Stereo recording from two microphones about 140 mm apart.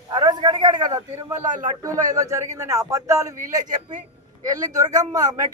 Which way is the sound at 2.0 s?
25° right (ahead or behind).